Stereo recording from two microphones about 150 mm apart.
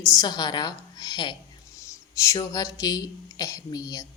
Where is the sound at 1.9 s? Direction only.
20° left (ahead or behind).